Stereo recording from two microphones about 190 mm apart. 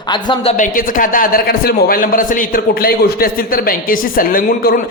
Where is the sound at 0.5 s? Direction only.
45° left (ahead or behind).